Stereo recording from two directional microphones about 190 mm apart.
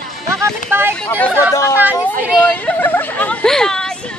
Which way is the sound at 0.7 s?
10° right (ahead or behind).